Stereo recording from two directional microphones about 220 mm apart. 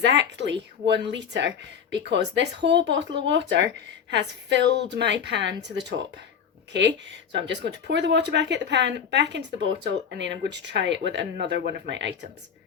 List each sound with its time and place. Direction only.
0.0 s speech: 55° right (ahead or behind)